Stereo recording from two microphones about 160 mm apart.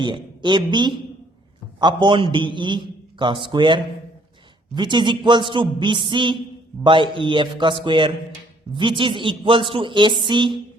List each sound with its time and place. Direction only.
0.0 s a man's voice: 30° right (ahead or behind)